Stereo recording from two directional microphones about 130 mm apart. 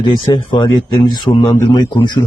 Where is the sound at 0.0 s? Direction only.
35° left (ahead or behind).